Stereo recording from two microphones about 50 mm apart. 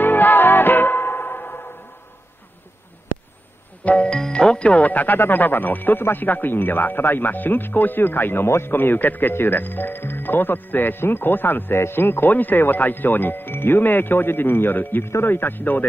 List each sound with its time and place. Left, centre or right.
0.0 s music: left
3.8 s music: left
4.2 s speech: centre; by 15.9 s left